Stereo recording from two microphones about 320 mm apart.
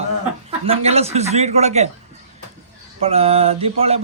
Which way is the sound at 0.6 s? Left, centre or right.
Centre.